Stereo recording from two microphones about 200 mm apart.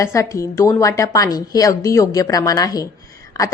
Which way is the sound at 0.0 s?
15° left (ahead or behind).